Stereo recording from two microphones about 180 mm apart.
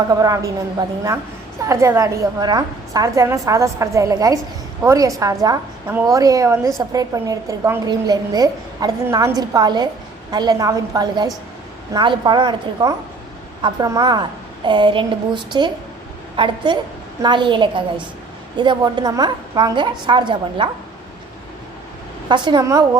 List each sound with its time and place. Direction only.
0.1 s a woman's voice: 20° right (ahead or behind)
22.3 s a woman's voice: 25° right (ahead or behind)